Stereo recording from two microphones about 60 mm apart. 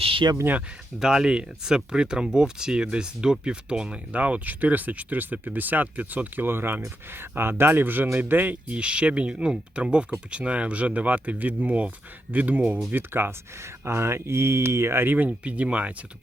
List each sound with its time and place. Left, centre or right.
0.9 s speech: centre; by 8.5 s right
8.7 s speech: centre; by 15.0 s right
15.0 s speech: right